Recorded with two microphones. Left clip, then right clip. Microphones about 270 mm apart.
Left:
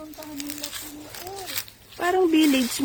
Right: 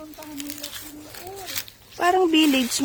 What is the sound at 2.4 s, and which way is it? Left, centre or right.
Speech, centre.